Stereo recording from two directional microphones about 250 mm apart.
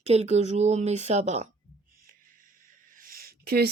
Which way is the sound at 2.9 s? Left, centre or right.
Right.